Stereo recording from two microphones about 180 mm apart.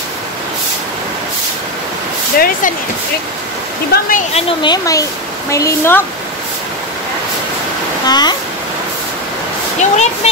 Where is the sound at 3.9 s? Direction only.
50° left (ahead or behind).